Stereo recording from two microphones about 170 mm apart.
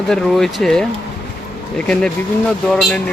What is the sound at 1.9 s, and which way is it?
Speech, 5° left (ahead or behind).